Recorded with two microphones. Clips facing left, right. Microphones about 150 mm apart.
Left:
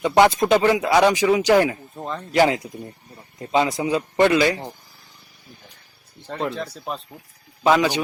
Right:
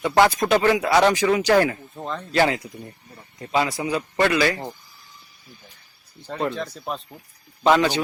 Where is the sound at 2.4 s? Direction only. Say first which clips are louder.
Left 4 dB; 20° left (ahead or behind).